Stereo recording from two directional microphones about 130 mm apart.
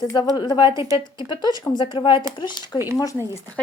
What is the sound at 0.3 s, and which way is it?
Speech, 30° left (ahead or behind).